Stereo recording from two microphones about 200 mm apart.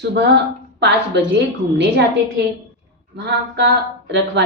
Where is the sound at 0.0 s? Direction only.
55° right (ahead or behind).